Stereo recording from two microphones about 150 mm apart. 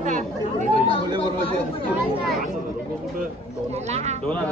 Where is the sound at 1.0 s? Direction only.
30° right (ahead or behind).